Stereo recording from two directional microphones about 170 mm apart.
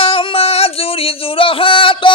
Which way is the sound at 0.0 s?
30° left (ahead or behind).